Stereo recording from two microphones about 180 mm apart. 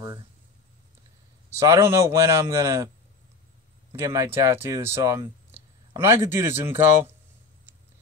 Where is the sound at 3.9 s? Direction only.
15° right (ahead or behind).